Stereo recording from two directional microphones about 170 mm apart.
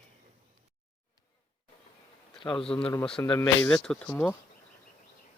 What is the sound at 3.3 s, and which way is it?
Speech, 15° left (ahead or behind).